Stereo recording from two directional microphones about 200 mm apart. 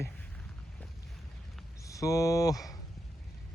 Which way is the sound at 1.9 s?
15° left (ahead or behind).